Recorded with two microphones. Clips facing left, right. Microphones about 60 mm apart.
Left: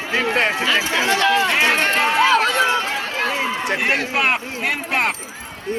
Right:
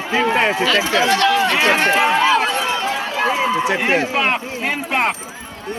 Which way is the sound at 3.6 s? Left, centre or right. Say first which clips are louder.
Right 3 dB; centre.